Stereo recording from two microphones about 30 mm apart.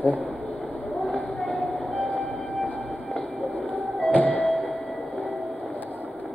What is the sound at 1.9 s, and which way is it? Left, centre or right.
Train, left.